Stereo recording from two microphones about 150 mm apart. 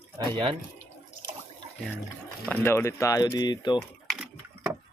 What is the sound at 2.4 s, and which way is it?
Speech, 15° left (ahead or behind).